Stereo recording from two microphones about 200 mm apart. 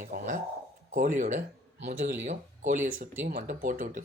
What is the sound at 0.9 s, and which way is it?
Speech, 40° right (ahead or behind).